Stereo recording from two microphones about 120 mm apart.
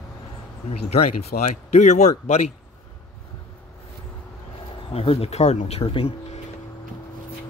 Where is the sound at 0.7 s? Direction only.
65° left (ahead or behind).